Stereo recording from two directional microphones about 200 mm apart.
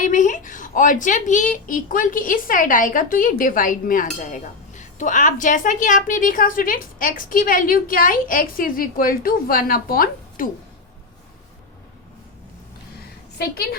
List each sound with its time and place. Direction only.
0.0 s speech: 40° left (ahead or behind)